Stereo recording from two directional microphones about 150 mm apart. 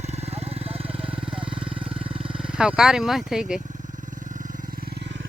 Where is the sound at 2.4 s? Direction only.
5° right (ahead or behind).